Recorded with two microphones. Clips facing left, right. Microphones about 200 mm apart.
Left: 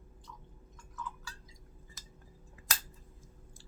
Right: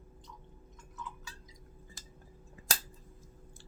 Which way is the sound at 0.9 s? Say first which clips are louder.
Left 2 dB; 20° right (ahead or behind).